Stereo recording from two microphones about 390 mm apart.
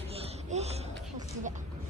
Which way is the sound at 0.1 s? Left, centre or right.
Centre.